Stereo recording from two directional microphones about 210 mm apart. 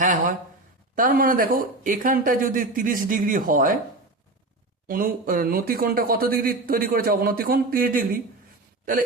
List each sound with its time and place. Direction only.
0.0 s speech: 40° right (ahead or behind)
4.9 s speech: 40° right (ahead or behind)